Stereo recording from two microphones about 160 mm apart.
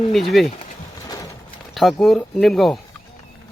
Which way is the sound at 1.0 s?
20° left (ahead or behind).